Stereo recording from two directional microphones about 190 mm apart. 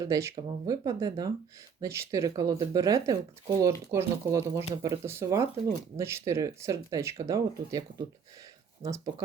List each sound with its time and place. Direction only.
0.0 s speech: 15° right (ahead or behind)